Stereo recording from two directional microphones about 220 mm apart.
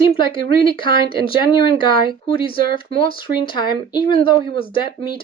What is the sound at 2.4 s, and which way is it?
Speech, 25° left (ahead or behind).